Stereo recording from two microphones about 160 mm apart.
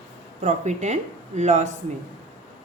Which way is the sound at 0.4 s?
45° right (ahead or behind).